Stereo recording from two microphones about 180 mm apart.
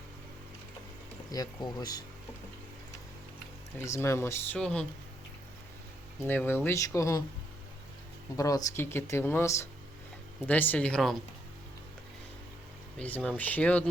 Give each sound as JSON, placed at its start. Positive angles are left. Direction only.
{"t": 1.3, "sound": "speech", "side_deg": 20}
{"t": 3.8, "sound": "speech", "side_deg": 15}
{"t": 6.2, "sound": "speech", "side_deg": 10}
{"t": 8.4, "sound": "speech", "side_deg": 20}
{"t": 13.0, "sound": "speech", "side_deg": 10}